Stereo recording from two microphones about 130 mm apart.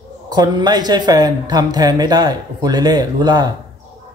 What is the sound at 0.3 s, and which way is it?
Speech, 30° right (ahead or behind).